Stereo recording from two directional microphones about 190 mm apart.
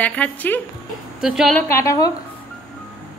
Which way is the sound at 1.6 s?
15° left (ahead or behind).